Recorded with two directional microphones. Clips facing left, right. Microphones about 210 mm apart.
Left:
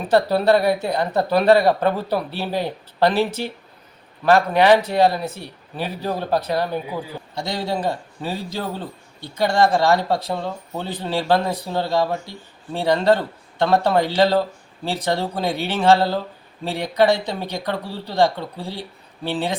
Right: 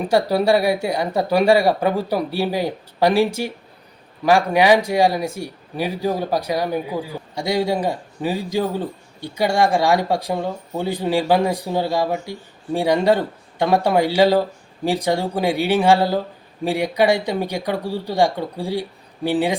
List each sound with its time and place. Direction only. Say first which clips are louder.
0.0 s speech: even; 10° right (ahead or behind)